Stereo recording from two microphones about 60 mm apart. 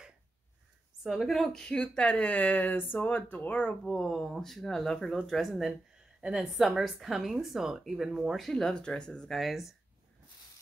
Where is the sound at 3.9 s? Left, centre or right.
Centre.